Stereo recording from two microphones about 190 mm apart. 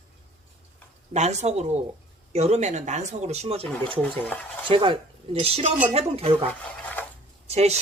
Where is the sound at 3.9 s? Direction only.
10° left (ahead or behind).